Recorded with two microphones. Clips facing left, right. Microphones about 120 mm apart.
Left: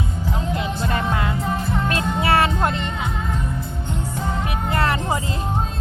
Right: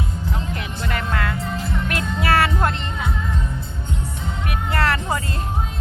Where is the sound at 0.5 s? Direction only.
20° left (ahead or behind).